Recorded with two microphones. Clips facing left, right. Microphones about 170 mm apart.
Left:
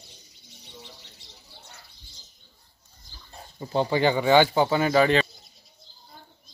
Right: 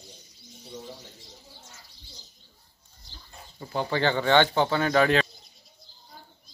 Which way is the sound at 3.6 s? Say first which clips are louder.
Left 4 dB; 20° left (ahead or behind).